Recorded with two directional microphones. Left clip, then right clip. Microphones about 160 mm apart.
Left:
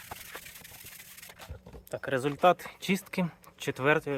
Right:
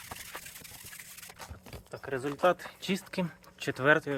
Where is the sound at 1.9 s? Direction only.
90° left.